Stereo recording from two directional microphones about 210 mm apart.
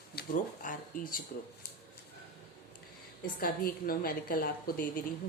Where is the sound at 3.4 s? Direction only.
45° left (ahead or behind).